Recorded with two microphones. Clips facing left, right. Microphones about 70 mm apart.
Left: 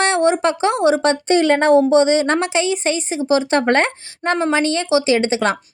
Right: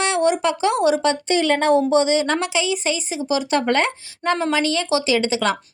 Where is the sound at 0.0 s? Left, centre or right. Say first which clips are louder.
Left 3 dB; left.